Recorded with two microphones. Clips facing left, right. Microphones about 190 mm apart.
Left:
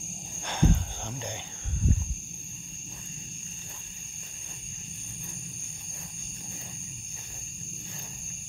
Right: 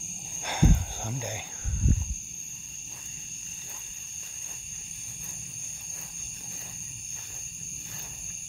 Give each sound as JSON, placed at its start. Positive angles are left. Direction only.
{"t": 0.5, "sound": "cricket", "side_deg": -10}